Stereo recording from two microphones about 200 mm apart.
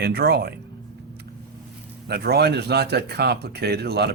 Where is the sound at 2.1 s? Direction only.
55° right (ahead or behind).